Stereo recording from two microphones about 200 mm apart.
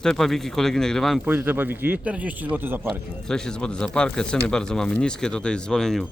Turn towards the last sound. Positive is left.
turn(degrees=0)  # may be behind; listen again after turning